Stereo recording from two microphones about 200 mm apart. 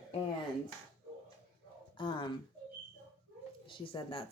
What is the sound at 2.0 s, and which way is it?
Speech, 25° left (ahead or behind).